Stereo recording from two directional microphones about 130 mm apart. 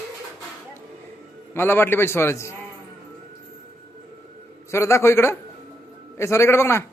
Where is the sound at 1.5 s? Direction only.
15° left (ahead or behind).